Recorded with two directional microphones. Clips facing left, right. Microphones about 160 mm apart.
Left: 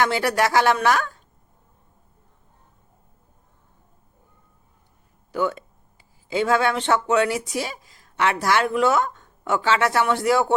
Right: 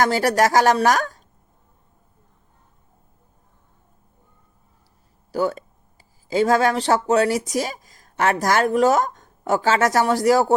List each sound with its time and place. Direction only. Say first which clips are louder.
0.0 s speech: right 3 dB; 40° right (ahead or behind)
5.3 s speech: right 2 dB; 40° right (ahead or behind)